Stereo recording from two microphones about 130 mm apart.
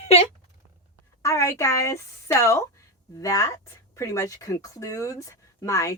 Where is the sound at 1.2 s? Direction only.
25° left (ahead or behind).